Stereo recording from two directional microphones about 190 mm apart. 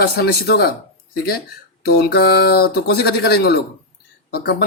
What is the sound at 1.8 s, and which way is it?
Speech, 55° left (ahead or behind).